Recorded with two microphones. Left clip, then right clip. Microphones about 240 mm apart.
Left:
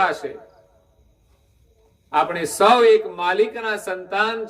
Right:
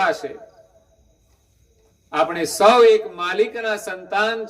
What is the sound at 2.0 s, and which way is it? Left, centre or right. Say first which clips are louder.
A man's voice: even; centre.